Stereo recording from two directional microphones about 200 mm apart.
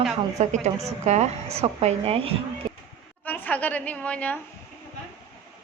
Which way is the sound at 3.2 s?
10° left (ahead or behind).